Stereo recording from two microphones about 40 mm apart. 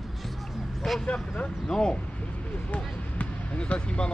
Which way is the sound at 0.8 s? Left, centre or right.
Centre.